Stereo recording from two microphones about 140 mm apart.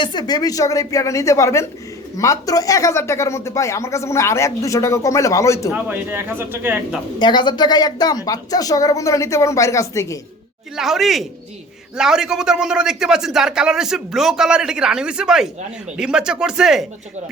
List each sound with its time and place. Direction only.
0.0 s speech: 30° left (ahead or behind)
5.7 s speech: 15° right (ahead or behind)
7.2 s speech: 35° left (ahead or behind)
10.8 s a man's voice: centre (ahead or behind)